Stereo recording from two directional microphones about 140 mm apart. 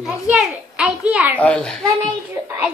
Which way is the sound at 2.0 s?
15° right (ahead or behind).